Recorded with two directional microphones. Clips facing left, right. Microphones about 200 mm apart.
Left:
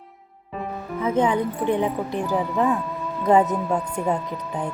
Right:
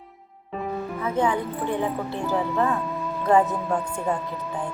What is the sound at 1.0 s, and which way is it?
A woman's voice, 20° left (ahead or behind).